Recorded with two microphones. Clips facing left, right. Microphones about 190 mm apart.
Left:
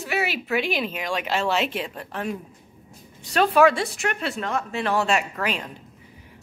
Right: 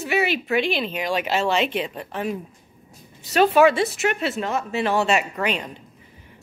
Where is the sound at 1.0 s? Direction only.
5° right (ahead or behind).